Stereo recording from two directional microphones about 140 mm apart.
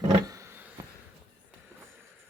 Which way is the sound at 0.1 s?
25° right (ahead or behind).